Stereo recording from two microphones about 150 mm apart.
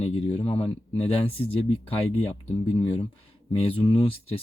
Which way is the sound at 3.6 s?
40° left (ahead or behind).